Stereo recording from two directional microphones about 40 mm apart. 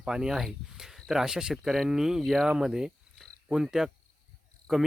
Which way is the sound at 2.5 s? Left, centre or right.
Centre.